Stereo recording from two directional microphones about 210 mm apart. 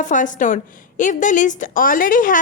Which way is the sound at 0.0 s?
35° left (ahead or behind).